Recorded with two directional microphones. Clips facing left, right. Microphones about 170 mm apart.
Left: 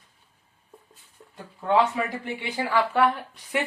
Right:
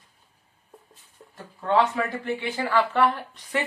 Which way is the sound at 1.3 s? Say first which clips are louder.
Even; 15° left (ahead or behind).